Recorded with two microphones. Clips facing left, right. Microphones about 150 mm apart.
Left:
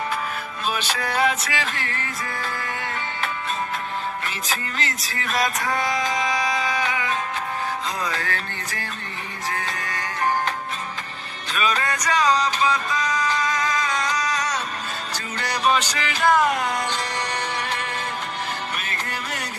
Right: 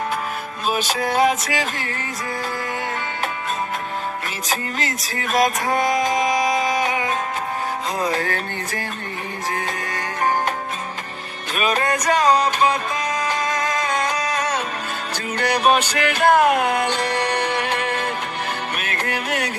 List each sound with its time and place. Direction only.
0.7 s music: 45° right (ahead or behind)
4.4 s music: 45° right (ahead or behind)
6.3 s a sound: 45° right (ahead or behind)
8.1 s music: 40° right (ahead or behind)
11.5 s music: 50° right (ahead or behind)